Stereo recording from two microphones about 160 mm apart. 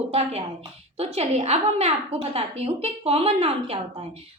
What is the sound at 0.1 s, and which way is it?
A woman's voice, 40° right (ahead or behind).